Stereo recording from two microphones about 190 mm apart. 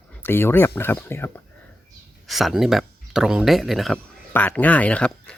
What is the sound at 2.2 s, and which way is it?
Speech, centre (ahead or behind).